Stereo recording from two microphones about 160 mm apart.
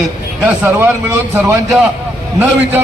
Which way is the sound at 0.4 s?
10° right (ahead or behind).